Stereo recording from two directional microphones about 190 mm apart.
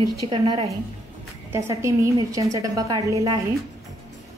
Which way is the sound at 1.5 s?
15° right (ahead or behind).